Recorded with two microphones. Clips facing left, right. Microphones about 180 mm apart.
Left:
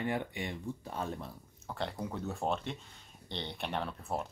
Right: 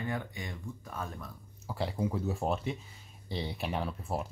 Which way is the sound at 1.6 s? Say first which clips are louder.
Right 4 dB; 5° right (ahead or behind).